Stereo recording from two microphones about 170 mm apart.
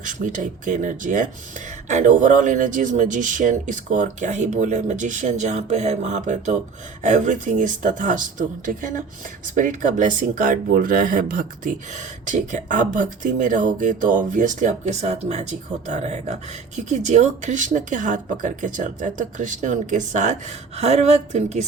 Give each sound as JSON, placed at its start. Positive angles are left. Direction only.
{"t": 0.0, "sound": "a woman's voice", "side_deg": -50}